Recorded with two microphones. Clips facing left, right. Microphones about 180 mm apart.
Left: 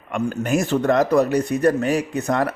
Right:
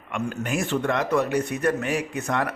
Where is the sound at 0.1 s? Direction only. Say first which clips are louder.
Left 6 dB; 40° left (ahead or behind).